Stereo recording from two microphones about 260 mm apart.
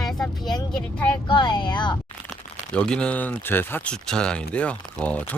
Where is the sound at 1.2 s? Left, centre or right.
Centre.